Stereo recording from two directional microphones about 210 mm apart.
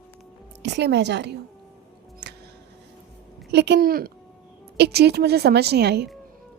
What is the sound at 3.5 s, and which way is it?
Speech, 55° right (ahead or behind).